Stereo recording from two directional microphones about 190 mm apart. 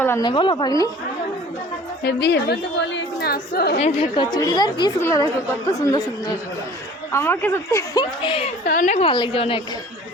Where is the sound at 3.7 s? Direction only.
35° left (ahead or behind); by 8.0 s 15° left (ahead or behind).